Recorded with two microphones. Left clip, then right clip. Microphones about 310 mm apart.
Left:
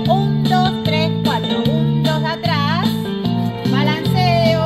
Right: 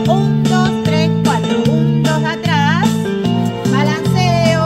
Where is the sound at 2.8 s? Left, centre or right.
Right.